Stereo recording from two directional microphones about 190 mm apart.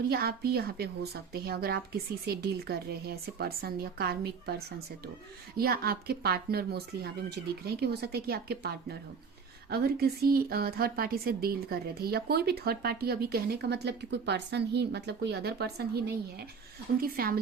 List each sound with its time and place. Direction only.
0.1 s a woman's voice: 55° right (ahead or behind)